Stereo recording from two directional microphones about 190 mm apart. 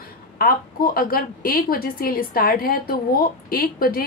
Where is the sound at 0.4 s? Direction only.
50° left (ahead or behind).